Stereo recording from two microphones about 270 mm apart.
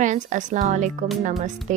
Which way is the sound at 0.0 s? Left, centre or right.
Right.